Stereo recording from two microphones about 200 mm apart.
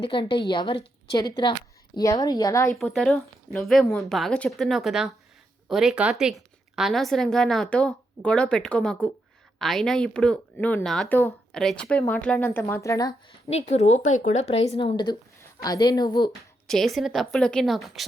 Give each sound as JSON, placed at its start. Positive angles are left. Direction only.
{"t": 0.0, "sound": "a woman's voice", "side_deg": 25}
{"t": 2.7, "sound": "a woman's voice", "side_deg": 5}
{"t": 13.5, "sound": "speech", "side_deg": 35}
{"t": 16.6, "sound": "a woman's voice", "side_deg": 0}